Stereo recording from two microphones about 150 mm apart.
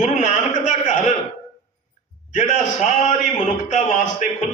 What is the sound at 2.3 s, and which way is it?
A man's voice, 55° left (ahead or behind).